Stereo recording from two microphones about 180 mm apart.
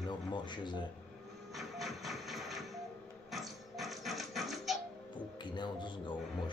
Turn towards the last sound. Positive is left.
turn(degrees=25)  # may be behind; listen again after turning